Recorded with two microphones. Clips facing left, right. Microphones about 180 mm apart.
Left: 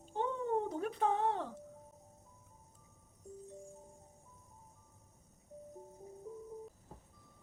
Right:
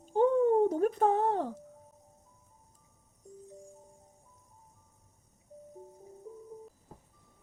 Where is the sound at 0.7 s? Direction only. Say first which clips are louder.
Right 8 dB; 45° right (ahead or behind).